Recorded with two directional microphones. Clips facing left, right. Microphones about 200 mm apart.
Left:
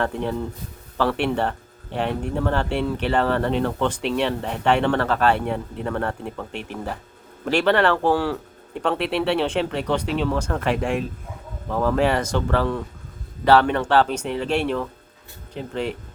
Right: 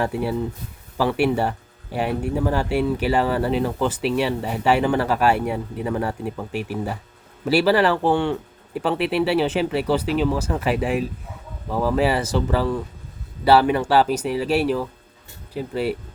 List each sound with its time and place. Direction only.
0.0 s speech: 10° right (ahead or behind)